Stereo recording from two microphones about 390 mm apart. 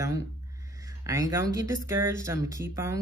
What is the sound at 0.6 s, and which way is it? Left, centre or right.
Speech, centre.